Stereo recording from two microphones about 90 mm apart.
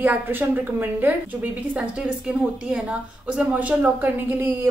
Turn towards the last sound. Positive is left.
turn(degrees=-20)  # may be behind; listen again after turning